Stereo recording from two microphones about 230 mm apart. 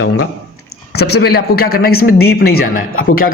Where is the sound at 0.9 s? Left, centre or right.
Left.